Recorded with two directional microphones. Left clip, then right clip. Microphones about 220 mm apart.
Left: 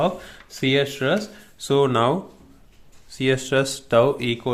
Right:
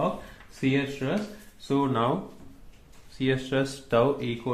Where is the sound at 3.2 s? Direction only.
35° left (ahead or behind).